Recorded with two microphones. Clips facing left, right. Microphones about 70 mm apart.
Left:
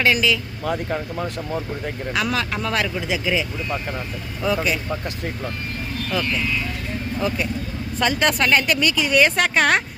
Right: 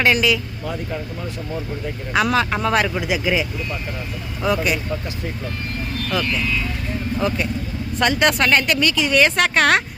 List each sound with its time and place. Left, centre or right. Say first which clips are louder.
0.0 s speech: right 2 dB; centre
0.6 s speech: left 3 dB; left
2.2 s speech: right 7 dB; centre
4.4 s speech: right 2 dB; centre
7.2 s speech: right 1 dB; centre